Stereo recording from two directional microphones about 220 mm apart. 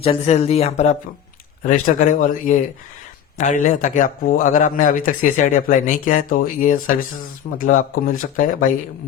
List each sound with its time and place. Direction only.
0.0 s a man's voice: 25° left (ahead or behind)